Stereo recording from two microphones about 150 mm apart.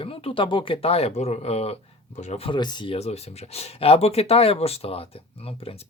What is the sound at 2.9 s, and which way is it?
Speech, 45° left (ahead or behind).